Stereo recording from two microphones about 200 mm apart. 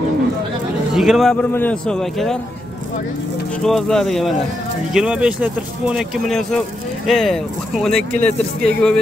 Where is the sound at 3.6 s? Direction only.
Centre (ahead or behind).